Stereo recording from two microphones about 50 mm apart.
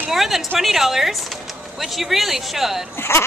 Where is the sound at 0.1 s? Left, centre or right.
Centre.